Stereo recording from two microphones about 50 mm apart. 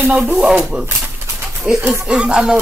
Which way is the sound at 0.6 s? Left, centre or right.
Centre.